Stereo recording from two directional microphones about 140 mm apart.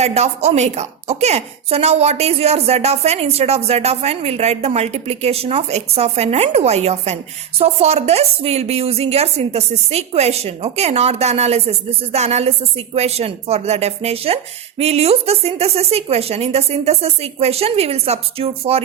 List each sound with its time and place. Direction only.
0.0 s a woman's voice: 50° right (ahead or behind)